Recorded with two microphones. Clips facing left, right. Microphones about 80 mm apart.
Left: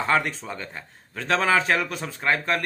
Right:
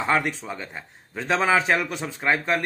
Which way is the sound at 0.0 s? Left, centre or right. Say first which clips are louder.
Even; centre.